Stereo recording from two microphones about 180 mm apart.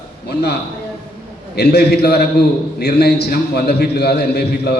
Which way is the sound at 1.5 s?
65° left (ahead or behind).